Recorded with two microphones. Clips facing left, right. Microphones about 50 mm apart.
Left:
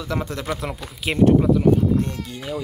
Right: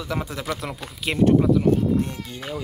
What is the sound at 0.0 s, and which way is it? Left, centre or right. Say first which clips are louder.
Speech: left 2 dB; centre.